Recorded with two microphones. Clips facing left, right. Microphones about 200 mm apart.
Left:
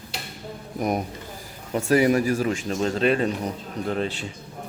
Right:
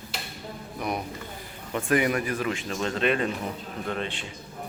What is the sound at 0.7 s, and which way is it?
A man's voice, 45° left (ahead or behind).